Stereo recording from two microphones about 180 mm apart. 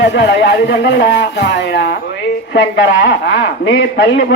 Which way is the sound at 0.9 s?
65° left (ahead or behind).